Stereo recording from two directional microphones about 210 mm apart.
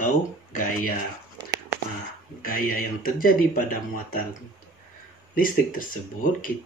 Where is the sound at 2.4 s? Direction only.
40° left (ahead or behind).